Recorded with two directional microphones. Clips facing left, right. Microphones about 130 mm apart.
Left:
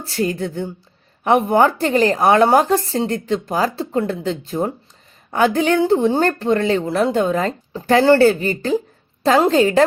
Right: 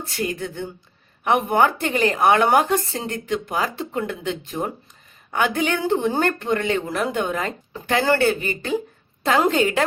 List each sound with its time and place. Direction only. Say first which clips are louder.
0.0 s speech: left 5 dB; 35° left (ahead or behind)